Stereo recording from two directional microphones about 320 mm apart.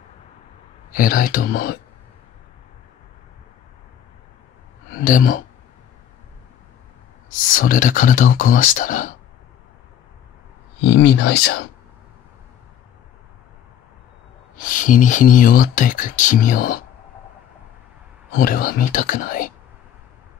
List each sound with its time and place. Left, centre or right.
0.9 s speech: left
4.9 s speech: left
7.5 s speech: left
10.8 s speech: left
14.6 s speech: left
18.3 s speech: left